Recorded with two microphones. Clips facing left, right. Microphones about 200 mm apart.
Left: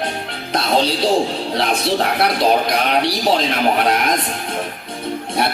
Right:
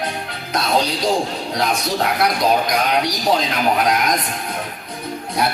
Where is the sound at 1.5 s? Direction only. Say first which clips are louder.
Left 2 dB; 30° left (ahead or behind).